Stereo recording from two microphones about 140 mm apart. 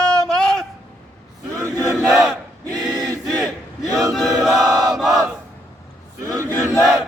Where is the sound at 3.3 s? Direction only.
Centre (ahead or behind).